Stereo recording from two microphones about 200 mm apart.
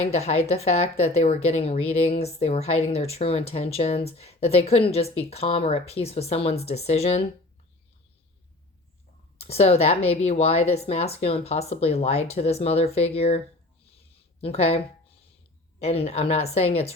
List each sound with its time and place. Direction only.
0.0 s speech: 30° left (ahead or behind)
9.4 s speech: 30° left (ahead or behind)
14.4 s speech: 30° left (ahead or behind)
15.8 s speech: 30° left (ahead or behind)